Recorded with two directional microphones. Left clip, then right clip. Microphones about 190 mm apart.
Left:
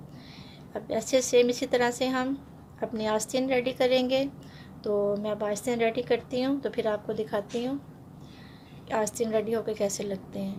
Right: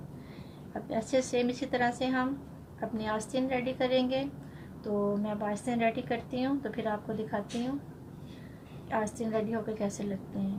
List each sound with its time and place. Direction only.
0.7 s a woman's voice: 55° left (ahead or behind)
8.9 s a woman's voice: 55° left (ahead or behind)